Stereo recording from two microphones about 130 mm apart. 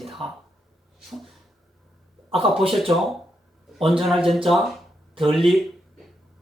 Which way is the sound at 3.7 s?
Centre (ahead or behind).